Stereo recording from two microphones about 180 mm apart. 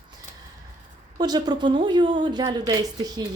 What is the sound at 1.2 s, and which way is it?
Speech, 25° right (ahead or behind).